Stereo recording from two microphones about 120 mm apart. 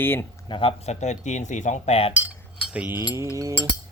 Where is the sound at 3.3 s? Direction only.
30° right (ahead or behind).